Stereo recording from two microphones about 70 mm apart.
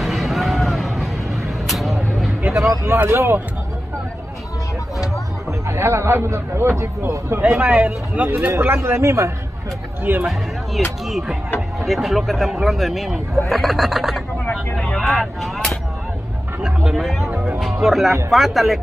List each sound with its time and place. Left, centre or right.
0.0 s a sound: centre
1.7 s vehicle: centre
2.6 s a man's voice: right
5.7 s a man's voice: right
8.5 s a man's voice: right
10.2 s speech: centre
14.8 s vehicle: centre
16.6 s speech: centre
17.6 s music: centre
18.3 s speech: centre